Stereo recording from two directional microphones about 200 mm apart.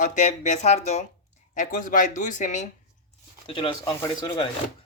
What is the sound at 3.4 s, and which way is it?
Speech, 25° left (ahead or behind).